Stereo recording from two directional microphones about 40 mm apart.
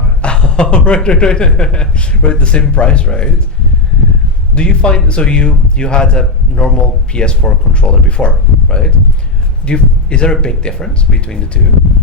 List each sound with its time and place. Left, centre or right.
0.2 s a man's voice: left
4.5 s a man's voice: left